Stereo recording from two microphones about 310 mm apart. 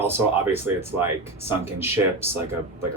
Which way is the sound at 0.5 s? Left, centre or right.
Centre.